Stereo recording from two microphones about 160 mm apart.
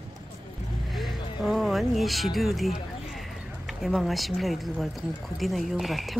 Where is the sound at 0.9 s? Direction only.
Centre (ahead or behind).